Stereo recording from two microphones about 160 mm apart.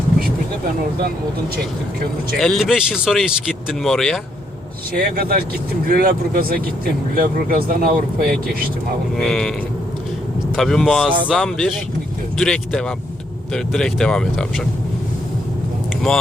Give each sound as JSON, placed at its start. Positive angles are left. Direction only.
{"t": 2.4, "sound": "speech", "side_deg": 0}
{"t": 4.9, "sound": "speech", "side_deg": -60}
{"t": 9.1, "sound": "speech", "side_deg": 5}
{"t": 10.5, "sound": "speech", "side_deg": 0}